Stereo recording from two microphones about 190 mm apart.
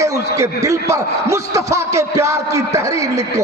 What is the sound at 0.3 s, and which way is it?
A man's voice, 15° right (ahead or behind).